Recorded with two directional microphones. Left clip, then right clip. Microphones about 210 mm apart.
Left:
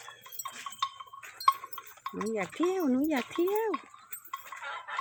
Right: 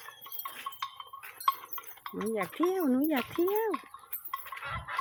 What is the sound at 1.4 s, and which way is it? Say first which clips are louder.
Speech: left 4 dB; 5° left (ahead or behind).